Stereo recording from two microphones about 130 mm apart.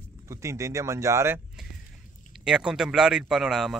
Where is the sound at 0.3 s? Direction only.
20° right (ahead or behind).